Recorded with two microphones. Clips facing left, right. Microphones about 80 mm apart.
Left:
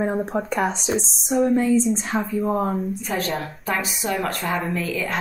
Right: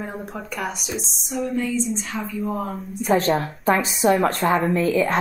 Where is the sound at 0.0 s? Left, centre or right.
Left.